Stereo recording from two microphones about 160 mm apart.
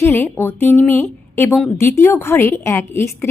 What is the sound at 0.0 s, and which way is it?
A woman's voice, 15° left (ahead or behind).